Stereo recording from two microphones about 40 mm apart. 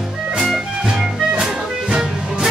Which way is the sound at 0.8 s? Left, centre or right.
Centre.